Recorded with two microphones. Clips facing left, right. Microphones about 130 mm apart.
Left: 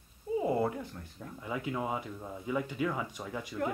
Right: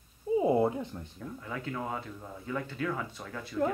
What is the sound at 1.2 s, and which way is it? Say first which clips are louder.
Speech: left 2 dB; 15° left (ahead or behind).